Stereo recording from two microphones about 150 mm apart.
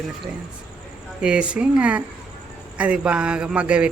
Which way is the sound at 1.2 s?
5° right (ahead or behind).